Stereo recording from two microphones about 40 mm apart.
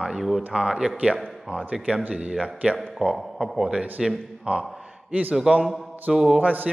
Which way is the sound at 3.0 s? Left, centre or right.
Centre.